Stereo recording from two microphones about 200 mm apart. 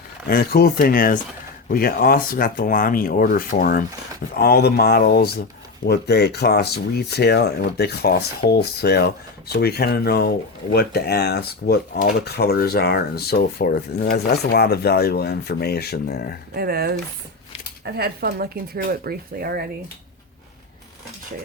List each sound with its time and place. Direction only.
0.3 s speech: 50° left (ahead or behind)
16.6 s speech: 50° right (ahead or behind)